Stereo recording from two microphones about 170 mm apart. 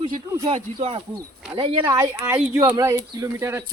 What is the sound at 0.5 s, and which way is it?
Speech, 30° right (ahead or behind).